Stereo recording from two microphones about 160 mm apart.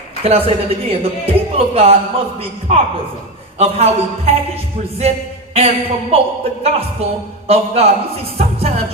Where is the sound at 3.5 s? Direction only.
40° right (ahead or behind).